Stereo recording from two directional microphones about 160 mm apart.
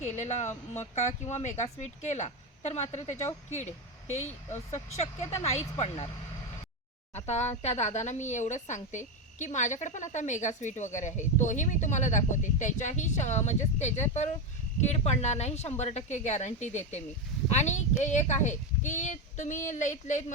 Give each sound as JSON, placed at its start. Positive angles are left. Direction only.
{"t": 0.0, "sound": "a woman's voice", "side_deg": 45}
{"t": 7.3, "sound": "a woman's voice", "side_deg": 45}